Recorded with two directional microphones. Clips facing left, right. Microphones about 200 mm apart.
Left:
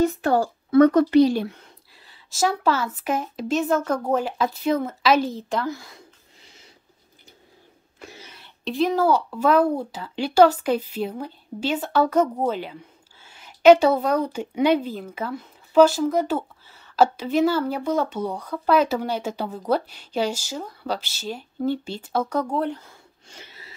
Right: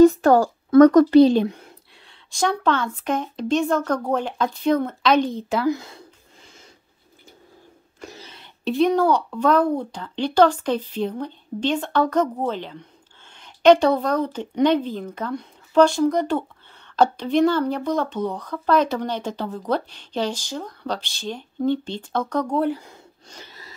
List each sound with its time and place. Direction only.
0.0 s speech: 40° right (ahead or behind)
2.0 s speech: 5° left (ahead or behind)
5.7 s speech: 20° right (ahead or behind)
8.6 s speech: centre (ahead or behind)
22.6 s speech: 5° right (ahead or behind)
23.2 s wheeze: 40° right (ahead or behind)